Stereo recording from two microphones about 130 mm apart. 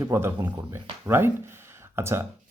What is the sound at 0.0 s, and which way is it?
Speech, 20° right (ahead or behind).